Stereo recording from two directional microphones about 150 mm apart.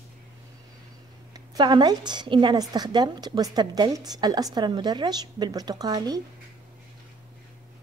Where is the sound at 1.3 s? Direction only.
30° right (ahead or behind).